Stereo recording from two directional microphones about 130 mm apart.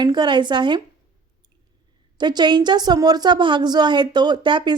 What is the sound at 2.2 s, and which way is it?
A woman's voice, 35° right (ahead or behind).